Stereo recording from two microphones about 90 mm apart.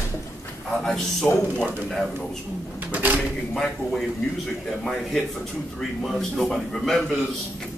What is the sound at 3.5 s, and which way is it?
Speech, 5° left (ahead or behind).